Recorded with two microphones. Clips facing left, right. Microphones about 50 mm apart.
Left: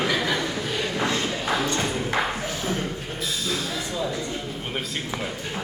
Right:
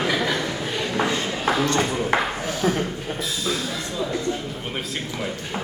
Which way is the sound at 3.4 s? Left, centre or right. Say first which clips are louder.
Right 3 dB; centre.